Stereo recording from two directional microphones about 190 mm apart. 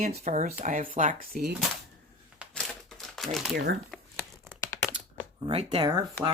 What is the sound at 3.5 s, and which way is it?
Speech, 55° right (ahead or behind).